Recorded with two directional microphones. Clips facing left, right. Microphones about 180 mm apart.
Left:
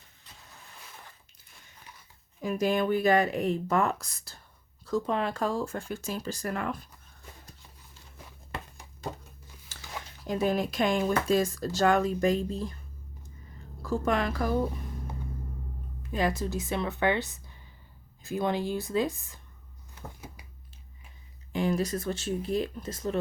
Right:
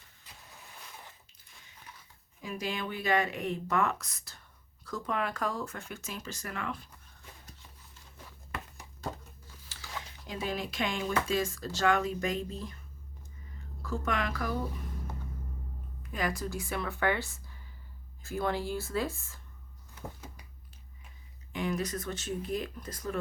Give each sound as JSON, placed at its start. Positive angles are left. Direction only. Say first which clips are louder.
{"t": 2.4, "sound": "speech", "louder": "left 9 dB", "side_deg": 45}
{"t": 10.2, "sound": "speech", "louder": "left 8 dB", "side_deg": 45}
{"t": 13.8, "sound": "speech", "louder": "left 5 dB", "side_deg": 35}
{"t": 16.1, "sound": "speech", "louder": "left 5 dB", "side_deg": 25}
{"t": 21.5, "sound": "speech", "louder": "left 5 dB", "side_deg": 30}